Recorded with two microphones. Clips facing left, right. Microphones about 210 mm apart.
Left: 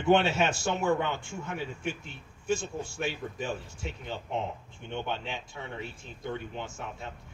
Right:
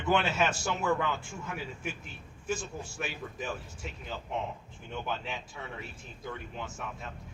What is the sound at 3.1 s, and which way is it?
Speech, 30° left (ahead or behind).